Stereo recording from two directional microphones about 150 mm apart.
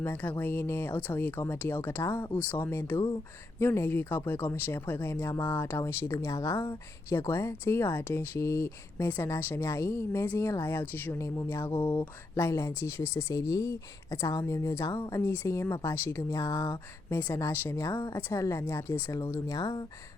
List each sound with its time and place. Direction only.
0.0 s speech: 15° left (ahead or behind)